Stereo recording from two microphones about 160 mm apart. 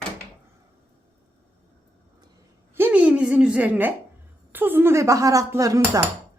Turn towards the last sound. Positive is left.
turn(degrees=-20)  # may be behind; listen again after turning